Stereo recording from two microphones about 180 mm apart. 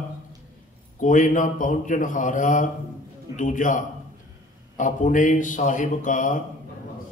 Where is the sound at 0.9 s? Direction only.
45° left (ahead or behind).